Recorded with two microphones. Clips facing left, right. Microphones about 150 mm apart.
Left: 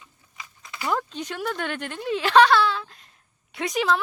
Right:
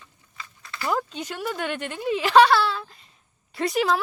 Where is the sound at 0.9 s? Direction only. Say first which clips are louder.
Even; 5° right (ahead or behind).